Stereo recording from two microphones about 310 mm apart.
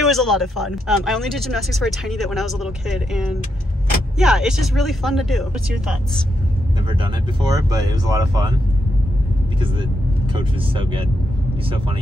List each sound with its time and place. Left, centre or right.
0.0 s speech: centre
6.9 s speech: centre
10.3 s speech: centre